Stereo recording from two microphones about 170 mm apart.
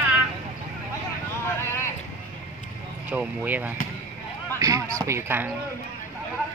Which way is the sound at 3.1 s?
10° right (ahead or behind).